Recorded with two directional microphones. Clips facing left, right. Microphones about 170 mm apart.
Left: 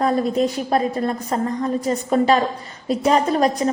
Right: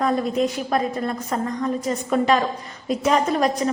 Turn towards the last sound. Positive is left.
turn(degrees=35)  # may be behind; listen again after turning